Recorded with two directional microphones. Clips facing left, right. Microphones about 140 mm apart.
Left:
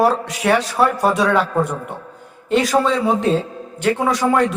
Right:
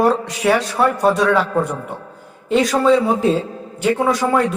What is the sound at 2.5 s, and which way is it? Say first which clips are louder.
A man's voice: right 2 dB; centre (ahead or behind).